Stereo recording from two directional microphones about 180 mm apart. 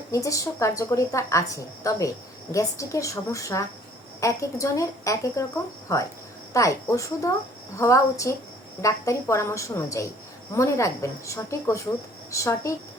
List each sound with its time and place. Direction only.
0.1 s a woman's voice: 20° left (ahead or behind)